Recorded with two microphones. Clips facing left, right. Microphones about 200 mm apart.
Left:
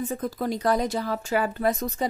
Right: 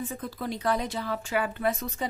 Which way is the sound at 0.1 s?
45° left (ahead or behind).